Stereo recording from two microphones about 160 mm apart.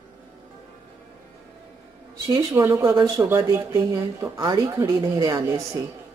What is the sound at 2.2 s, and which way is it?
Speech, 20° right (ahead or behind).